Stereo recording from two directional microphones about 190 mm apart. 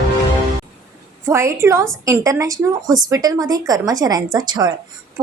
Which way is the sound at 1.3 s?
15° right (ahead or behind).